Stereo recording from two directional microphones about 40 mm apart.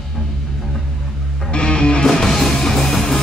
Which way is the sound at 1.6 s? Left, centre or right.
Left.